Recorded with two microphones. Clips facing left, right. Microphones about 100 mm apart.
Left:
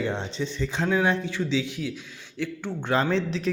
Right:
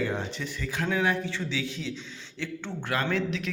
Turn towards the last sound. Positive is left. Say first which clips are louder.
# left 4 dB
turn(degrees=35)  # may be behind; listen again after turning